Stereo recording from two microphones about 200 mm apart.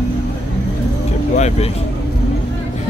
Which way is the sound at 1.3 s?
35° left (ahead or behind).